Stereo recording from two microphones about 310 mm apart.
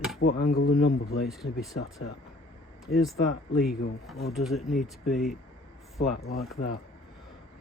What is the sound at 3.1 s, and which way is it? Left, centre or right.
Speech, left.